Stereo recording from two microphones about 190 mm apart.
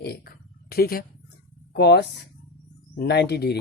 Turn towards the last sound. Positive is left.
turn(degrees=60)  # may be behind; listen again after turning